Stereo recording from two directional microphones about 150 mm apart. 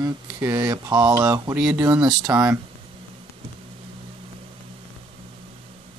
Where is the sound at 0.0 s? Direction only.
25° right (ahead or behind).